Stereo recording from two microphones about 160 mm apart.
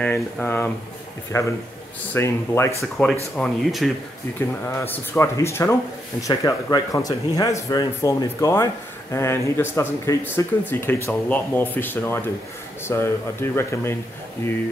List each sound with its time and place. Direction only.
0.0 s speech: 10° left (ahead or behind)
2.8 s speech: centre (ahead or behind)
4.4 s speech: 10° left (ahead or behind)